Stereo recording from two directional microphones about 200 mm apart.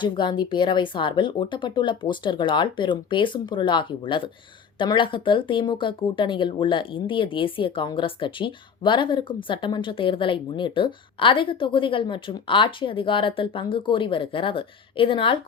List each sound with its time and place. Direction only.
0.0 s speech: 25° left (ahead or behind)